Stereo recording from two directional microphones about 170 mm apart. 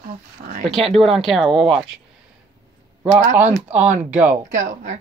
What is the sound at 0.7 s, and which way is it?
Speech, centre (ahead or behind).